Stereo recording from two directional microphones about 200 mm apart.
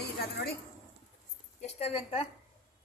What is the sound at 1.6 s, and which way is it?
Speech, 30° left (ahead or behind).